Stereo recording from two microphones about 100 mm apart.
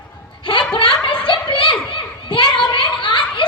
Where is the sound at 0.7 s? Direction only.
60° left (ahead or behind).